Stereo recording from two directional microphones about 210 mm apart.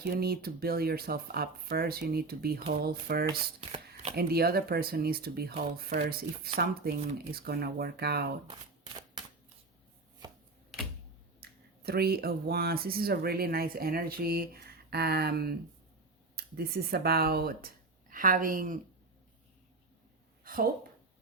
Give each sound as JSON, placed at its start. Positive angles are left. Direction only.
{"t": 0.0, "sound": "speech", "side_deg": -45}
{"t": 3.6, "sound": "chopping", "side_deg": -25}
{"t": 4.1, "sound": "speech", "side_deg": -45}
{"t": 9.2, "sound": "shuffling cards", "side_deg": -20}
{"t": 11.3, "sound": "speech", "side_deg": -50}
{"t": 20.4, "sound": "a sound", "side_deg": -40}